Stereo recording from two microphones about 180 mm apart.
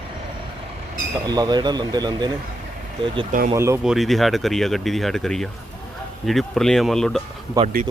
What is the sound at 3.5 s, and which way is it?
Speech, 15° right (ahead or behind).